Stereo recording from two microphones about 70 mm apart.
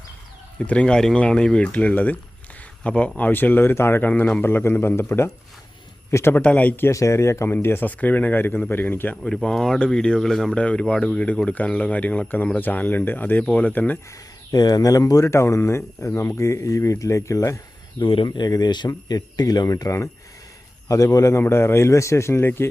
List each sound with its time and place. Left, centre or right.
0.6 s speech: centre; by 4.1 s left
4.1 s a man's voice: centre; by 6.3 s left
6.3 s speech: left
6.9 s a man's voice: left
9.2 s speech: centre
10.5 s speech: centre
14.5 s speech: left
18.3 s a man's voice: left